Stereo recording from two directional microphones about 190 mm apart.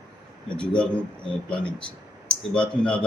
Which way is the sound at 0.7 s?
5° left (ahead or behind).